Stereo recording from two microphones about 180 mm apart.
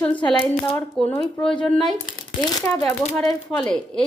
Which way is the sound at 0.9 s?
5° left (ahead or behind).